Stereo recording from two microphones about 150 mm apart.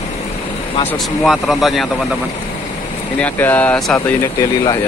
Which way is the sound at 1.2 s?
Centre (ahead or behind).